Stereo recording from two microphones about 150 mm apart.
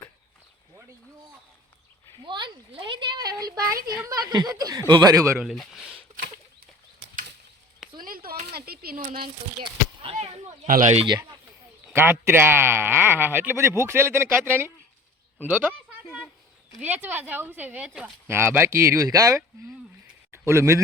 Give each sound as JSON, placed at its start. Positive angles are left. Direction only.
{"t": 2.2, "sound": "speech", "side_deg": -30}
{"t": 5.4, "sound": "speech", "side_deg": 0}
{"t": 7.9, "sound": "a sound", "side_deg": -70}
{"t": 9.2, "sound": "speech", "side_deg": -35}
{"t": 10.7, "sound": "speech", "side_deg": -65}
{"t": 10.9, "sound": "speech", "side_deg": -30}
{"t": 12.2, "sound": "a woman's voice", "side_deg": -15}
{"t": 16.0, "sound": "a sound", "side_deg": 5}
{"t": 16.8, "sound": "a woman's voice", "side_deg": -10}
{"t": 20.5, "sound": "speech", "side_deg": -20}